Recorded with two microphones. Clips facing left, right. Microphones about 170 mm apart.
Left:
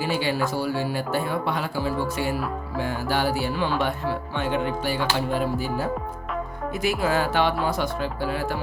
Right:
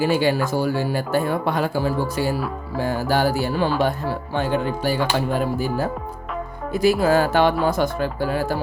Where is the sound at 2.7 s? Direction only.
40° right (ahead or behind).